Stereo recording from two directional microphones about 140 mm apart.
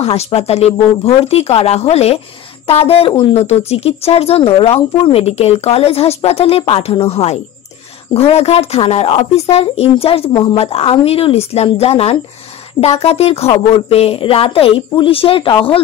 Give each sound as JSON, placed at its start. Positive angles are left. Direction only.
{"t": 0.0, "sound": "a woman's voice", "side_deg": 45}